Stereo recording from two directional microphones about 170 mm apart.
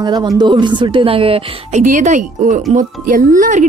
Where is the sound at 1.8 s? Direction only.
50° right (ahead or behind).